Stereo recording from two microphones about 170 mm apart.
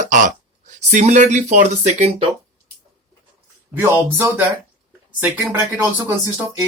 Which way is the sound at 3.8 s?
15° right (ahead or behind).